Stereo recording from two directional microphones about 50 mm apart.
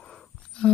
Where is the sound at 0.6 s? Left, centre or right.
Centre.